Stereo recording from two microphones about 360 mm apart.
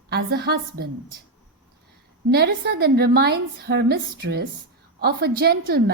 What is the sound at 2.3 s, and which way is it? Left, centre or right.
A woman's voice, right.